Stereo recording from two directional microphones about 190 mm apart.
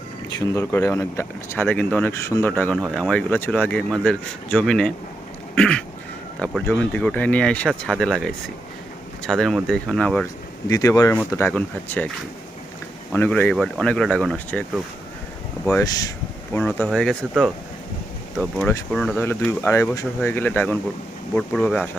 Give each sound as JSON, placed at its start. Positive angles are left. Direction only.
{"t": 0.3, "sound": "speech", "side_deg": 15}
{"t": 10.7, "sound": "speech", "side_deg": 20}
{"t": 13.1, "sound": "speech", "side_deg": 10}
{"t": 15.8, "sound": "speech", "side_deg": 20}
{"t": 16.6, "sound": "speech", "side_deg": 5}